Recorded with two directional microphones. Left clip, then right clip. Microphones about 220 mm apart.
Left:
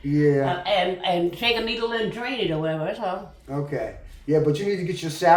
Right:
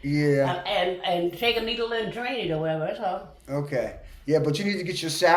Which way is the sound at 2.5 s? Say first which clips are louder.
Left 1 dB; 15° left (ahead or behind).